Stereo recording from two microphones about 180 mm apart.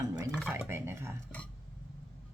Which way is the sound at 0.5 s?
15° right (ahead or behind).